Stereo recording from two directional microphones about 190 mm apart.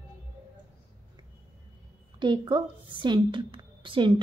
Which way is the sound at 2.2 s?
25° right (ahead or behind).